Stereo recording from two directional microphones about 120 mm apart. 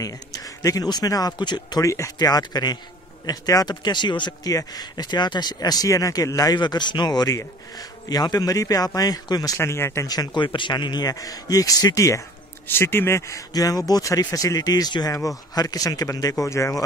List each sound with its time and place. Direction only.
0.0 s speech: 30° left (ahead or behind)
10.0 s speech: 35° left (ahead or behind)